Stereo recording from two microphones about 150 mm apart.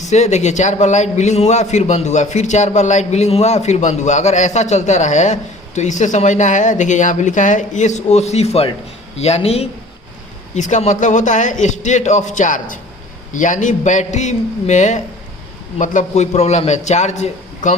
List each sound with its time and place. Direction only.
0.0 s a man's voice: 50° left (ahead or behind)